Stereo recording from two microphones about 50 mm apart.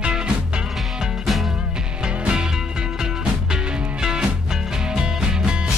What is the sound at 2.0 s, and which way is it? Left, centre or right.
Music, centre.